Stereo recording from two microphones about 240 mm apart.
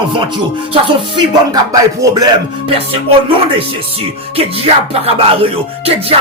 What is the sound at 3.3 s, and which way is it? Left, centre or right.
Music, right.